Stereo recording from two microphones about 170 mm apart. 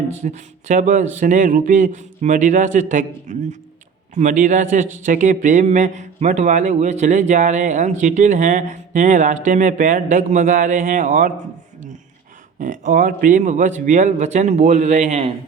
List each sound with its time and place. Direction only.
0.2 s a man's voice: 45° right (ahead or behind)
12.5 s a man's voice: 50° right (ahead or behind)